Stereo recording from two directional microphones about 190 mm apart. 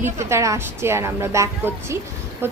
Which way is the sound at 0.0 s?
15° right (ahead or behind).